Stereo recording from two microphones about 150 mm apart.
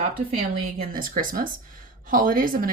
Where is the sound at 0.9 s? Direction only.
70° right (ahead or behind).